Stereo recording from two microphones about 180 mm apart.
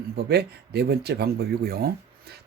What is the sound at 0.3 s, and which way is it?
Speech, 65° right (ahead or behind).